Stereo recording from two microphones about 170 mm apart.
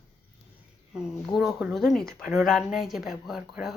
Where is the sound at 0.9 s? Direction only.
5° right (ahead or behind).